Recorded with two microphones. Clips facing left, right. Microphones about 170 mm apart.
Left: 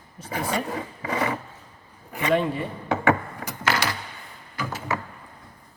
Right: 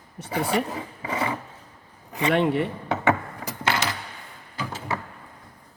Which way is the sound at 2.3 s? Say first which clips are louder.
Right 2 dB; 70° right (ahead or behind).